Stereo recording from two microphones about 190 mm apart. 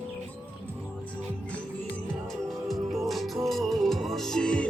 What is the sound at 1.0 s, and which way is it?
Music, 5° left (ahead or behind).